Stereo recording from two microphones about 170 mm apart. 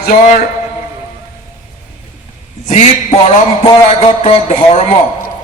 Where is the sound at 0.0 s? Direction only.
55° left (ahead or behind).